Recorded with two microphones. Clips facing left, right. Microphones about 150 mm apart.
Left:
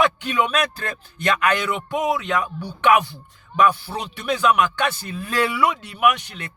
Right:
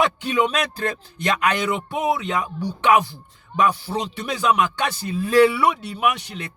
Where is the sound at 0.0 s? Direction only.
30° right (ahead or behind).